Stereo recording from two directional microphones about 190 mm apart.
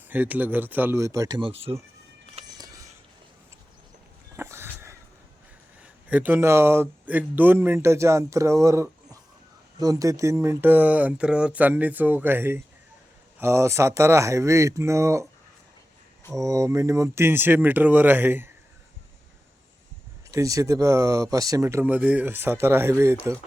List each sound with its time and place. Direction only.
0.1 s speech: 10° right (ahead or behind)
2.5 s a sound: 20° right (ahead or behind)
4.4 s a sound: 15° right (ahead or behind)
5.8 s speech: 5° right (ahead or behind)
16.3 s speech: 15° right (ahead or behind)
20.3 s speech: 15° right (ahead or behind)